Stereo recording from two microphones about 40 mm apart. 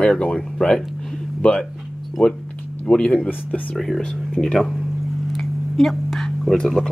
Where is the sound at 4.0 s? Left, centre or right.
Centre.